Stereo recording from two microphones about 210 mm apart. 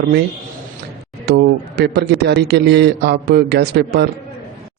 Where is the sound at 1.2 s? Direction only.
50° right (ahead or behind).